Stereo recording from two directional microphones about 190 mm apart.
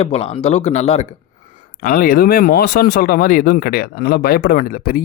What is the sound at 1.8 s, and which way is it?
Speech, 50° left (ahead or behind).